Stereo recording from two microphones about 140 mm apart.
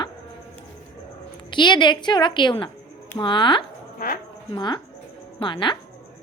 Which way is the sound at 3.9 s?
90° left.